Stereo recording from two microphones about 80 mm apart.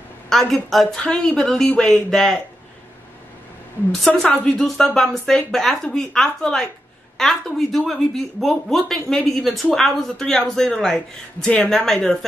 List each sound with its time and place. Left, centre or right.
0.3 s speech: centre
4.1 s speech: centre
4.6 s speech: centre